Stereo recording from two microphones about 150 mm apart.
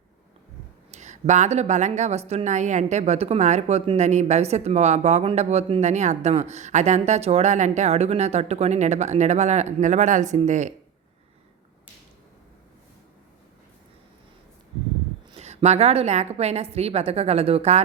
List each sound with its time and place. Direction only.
0.9 s a woman's voice: 50° right (ahead or behind)
15.4 s a woman's voice: 45° right (ahead or behind)